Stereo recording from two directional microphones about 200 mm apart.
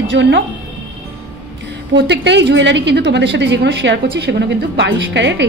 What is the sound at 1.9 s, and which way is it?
A woman's voice, 60° right (ahead or behind).